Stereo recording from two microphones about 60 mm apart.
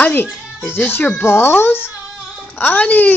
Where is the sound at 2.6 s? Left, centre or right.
Left.